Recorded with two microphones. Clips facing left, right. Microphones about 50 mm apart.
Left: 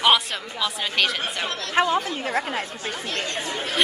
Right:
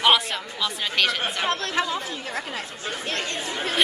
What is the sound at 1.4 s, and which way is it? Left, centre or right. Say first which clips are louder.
Speech: right 4 dB; right.